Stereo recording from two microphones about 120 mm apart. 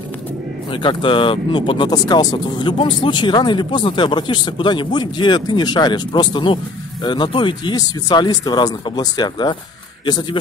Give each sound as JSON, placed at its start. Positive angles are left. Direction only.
{"t": 0.7, "sound": "speech", "side_deg": 45}